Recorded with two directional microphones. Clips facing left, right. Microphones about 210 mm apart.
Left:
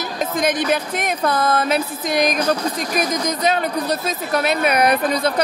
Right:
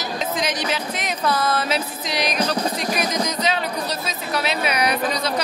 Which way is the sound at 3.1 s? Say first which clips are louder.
Left 3 dB; 50° left (ahead or behind).